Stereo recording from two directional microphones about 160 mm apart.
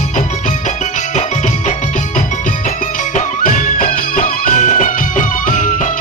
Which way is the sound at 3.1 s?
55° left (ahead or behind).